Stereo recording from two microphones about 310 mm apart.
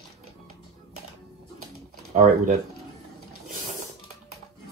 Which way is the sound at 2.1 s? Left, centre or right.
Right.